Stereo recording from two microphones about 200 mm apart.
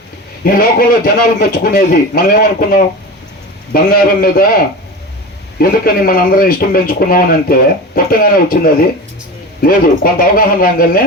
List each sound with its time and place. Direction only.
0.4 s a man's voice: 45° left (ahead or behind)
5.5 s a man's voice: 45° left (ahead or behind)